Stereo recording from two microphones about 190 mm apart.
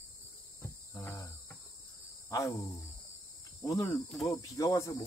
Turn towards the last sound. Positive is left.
turn(degrees=15)  # may be behind; listen again after turning